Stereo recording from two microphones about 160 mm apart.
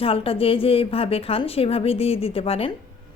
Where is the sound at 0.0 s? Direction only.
35° left (ahead or behind).